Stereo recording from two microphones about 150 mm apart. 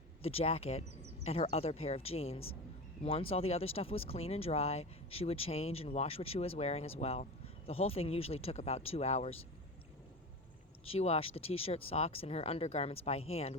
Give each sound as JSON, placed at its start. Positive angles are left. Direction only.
{"t": 0.2, "sound": "speech", "side_deg": 40}
{"t": 10.8, "sound": "speech", "side_deg": 40}